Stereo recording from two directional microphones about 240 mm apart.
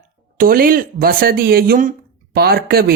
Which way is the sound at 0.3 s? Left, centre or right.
Right.